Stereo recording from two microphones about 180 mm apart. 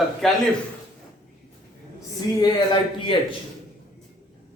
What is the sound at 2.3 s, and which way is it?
Speech, 25° left (ahead or behind).